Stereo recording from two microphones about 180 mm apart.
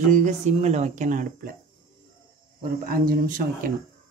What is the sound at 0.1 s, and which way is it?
Speech, 40° right (ahead or behind).